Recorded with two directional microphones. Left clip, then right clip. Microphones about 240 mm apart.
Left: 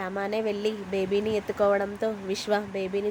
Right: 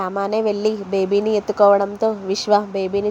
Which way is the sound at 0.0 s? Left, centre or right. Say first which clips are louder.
Right 9 dB; centre.